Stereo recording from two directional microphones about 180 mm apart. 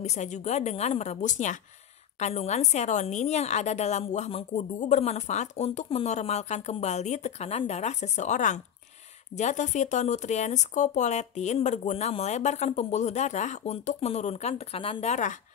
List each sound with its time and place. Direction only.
0.0 s a woman's voice: 40° left (ahead or behind)